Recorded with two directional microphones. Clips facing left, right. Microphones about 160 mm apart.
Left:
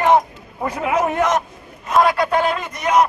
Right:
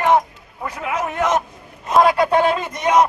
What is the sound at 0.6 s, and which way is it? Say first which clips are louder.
Speech: left 5 dB; 25° left (ahead or behind).